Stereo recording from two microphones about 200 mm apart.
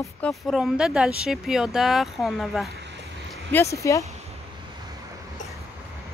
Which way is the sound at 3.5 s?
15° left (ahead or behind).